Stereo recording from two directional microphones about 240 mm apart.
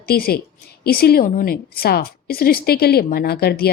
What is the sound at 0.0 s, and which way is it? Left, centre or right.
A woman's voice, left.